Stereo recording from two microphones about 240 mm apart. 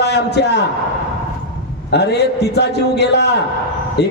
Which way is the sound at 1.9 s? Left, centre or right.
Left.